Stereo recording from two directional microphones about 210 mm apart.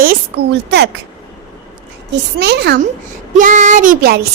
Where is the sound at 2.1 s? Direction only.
50° right (ahead or behind).